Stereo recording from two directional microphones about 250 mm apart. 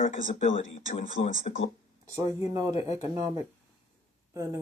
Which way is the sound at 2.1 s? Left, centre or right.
Centre.